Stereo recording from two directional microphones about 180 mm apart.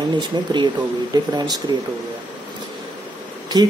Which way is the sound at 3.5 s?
20° right (ahead or behind).